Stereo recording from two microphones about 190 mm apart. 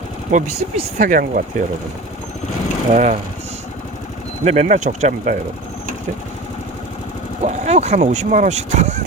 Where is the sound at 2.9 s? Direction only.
35° right (ahead or behind).